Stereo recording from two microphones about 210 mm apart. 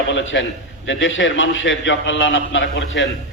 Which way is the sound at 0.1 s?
65° left (ahead or behind).